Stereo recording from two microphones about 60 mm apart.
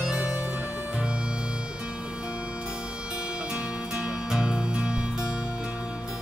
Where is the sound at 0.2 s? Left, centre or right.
Right.